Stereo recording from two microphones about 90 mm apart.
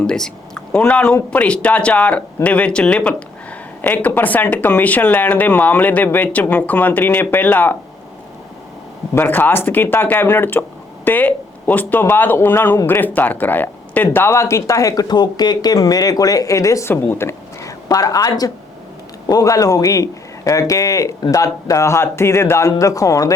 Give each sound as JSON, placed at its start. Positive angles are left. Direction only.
{"t": 0.0, "sound": "speech", "side_deg": 10}
{"t": 9.1, "sound": "speech", "side_deg": 25}